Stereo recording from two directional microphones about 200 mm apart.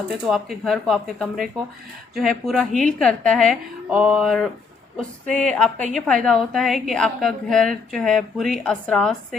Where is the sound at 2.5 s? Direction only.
Centre (ahead or behind).